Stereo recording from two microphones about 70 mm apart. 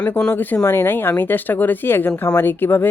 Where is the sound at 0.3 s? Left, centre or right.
Left.